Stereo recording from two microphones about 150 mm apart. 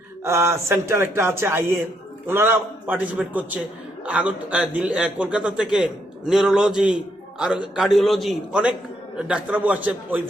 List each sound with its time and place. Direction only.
0.3 s a man's voice: 20° right (ahead or behind)